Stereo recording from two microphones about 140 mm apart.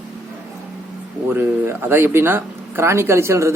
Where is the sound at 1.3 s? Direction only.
15° right (ahead or behind).